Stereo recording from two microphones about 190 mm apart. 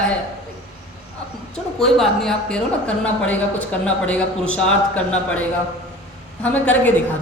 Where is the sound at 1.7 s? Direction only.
Centre (ahead or behind).